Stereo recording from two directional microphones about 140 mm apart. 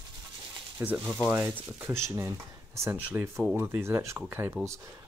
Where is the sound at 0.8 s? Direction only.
15° right (ahead or behind).